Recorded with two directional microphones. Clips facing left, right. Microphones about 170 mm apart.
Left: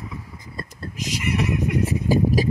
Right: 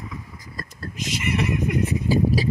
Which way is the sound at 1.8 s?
45° left (ahead or behind).